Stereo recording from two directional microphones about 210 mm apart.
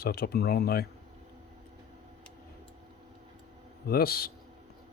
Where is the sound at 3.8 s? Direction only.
45° left (ahead or behind).